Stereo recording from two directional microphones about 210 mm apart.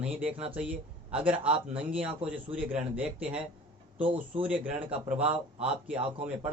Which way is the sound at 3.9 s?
25° right (ahead or behind).